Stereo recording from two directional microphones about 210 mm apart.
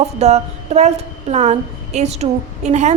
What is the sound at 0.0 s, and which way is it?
A woman's voice, 30° right (ahead or behind).